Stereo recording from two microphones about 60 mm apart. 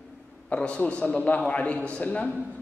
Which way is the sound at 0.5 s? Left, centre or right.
Left.